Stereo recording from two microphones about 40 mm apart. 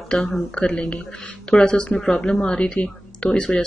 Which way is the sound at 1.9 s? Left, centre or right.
Centre.